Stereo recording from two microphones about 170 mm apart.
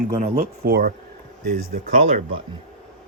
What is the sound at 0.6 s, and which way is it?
Speech, 65° right (ahead or behind).